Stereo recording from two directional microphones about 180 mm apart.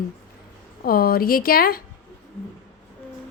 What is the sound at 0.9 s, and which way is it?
Speech, 55° left (ahead or behind).